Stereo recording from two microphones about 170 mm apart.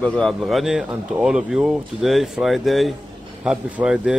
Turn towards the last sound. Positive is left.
turn(degrees=-5)  # may be behind; listen again after turning